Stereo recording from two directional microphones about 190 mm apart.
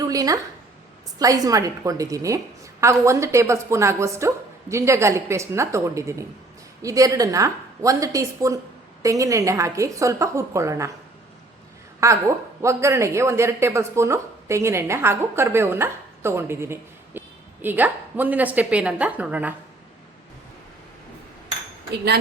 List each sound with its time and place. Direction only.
0.0 s a sound: 20° right (ahead or behind)
1.2 s a woman's voice: 20° right (ahead or behind)
12.0 s a woman's voice: 15° right (ahead or behind)